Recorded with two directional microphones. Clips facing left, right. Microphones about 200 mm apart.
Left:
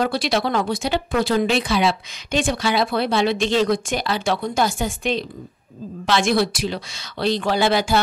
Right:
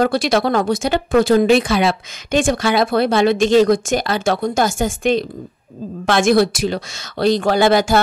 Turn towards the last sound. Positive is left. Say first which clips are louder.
# right 5 dB
turn(degrees=-45)  # may be behind; listen again after turning